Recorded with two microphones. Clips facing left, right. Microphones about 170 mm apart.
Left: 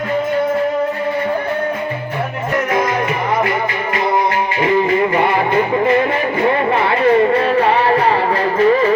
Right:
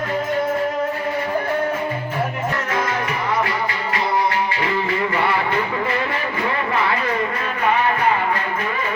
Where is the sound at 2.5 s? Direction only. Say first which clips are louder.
Left 10 dB; 15° left (ahead or behind).